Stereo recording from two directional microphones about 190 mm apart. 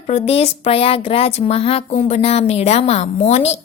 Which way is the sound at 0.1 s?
35° left (ahead or behind).